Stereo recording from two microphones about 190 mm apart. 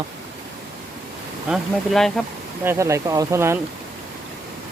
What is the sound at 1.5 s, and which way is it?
Speech, centre (ahead or behind).